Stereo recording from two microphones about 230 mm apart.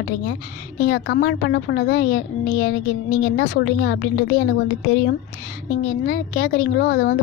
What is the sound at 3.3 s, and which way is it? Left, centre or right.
Speech, left.